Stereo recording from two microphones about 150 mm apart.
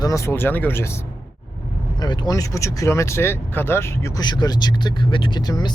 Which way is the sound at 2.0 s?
25° left (ahead or behind).